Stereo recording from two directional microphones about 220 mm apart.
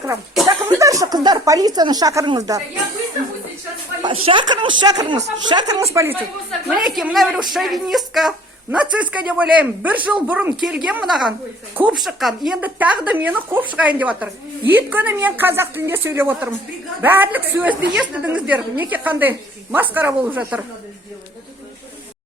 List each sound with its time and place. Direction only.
0.4 s speech: 15° right (ahead or behind)
4.0 s a woman's voice: 20° right (ahead or behind)
6.7 s a woman's voice: centre (ahead or behind)